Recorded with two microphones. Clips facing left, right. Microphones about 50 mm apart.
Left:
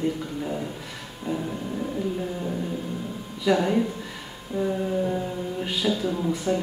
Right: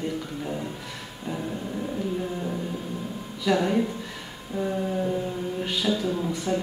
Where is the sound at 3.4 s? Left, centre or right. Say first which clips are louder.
Left 1 dB; centre.